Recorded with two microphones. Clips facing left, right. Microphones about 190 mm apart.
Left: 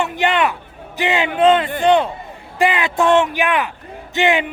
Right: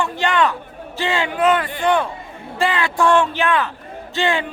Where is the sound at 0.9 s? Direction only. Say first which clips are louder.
Left 3 dB; 20° left (ahead or behind).